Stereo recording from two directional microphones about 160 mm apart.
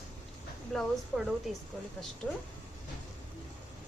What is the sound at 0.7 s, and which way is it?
Speech, centre (ahead or behind).